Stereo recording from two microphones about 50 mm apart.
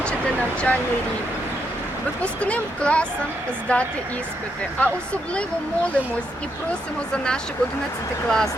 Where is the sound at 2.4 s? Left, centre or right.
Left.